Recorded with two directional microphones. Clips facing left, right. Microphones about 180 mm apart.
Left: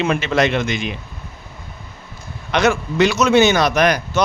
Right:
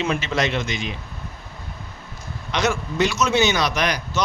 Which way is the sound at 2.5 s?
65° left (ahead or behind).